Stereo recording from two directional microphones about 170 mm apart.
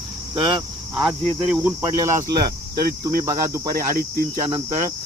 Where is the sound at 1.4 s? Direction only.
10° right (ahead or behind).